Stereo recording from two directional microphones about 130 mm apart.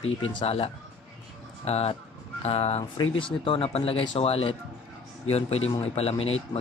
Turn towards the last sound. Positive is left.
turn(degrees=50)  # may be behind; listen again after turning